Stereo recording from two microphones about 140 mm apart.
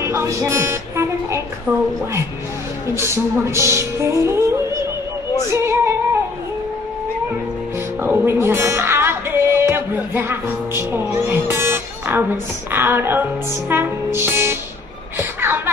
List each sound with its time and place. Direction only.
0.0 s speech: 20° right (ahead or behind)
3.0 s music: 20° right (ahead or behind)
5.5 s female singing: 20° right (ahead or behind)
8.0 s speech: 15° right (ahead or behind)
11.1 s music: 15° right (ahead or behind)
15.1 s a sound: 15° right (ahead or behind)